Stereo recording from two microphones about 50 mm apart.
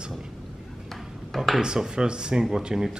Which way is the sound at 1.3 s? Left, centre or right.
Centre.